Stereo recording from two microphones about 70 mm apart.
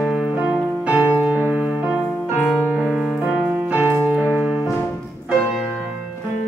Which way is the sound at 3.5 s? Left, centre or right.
Right.